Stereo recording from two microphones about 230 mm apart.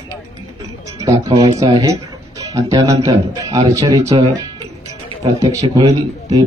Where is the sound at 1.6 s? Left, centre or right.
Centre.